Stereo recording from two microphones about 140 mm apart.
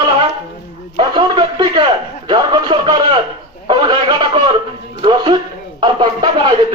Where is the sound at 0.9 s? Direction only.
35° right (ahead or behind).